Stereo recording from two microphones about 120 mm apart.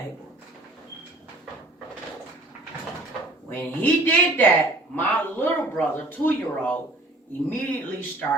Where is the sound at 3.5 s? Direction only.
15° left (ahead or behind).